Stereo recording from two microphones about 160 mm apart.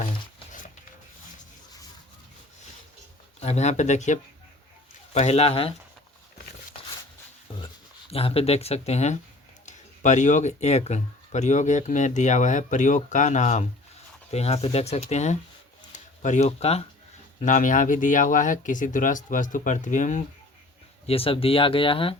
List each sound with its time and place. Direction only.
3.4 s speech: 45° left (ahead or behind)
7.5 s a sound: 30° left (ahead or behind)
8.1 s speech: 35° left (ahead or behind)
17.4 s speech: 55° left (ahead or behind)
21.1 s speech: 35° left (ahead or behind)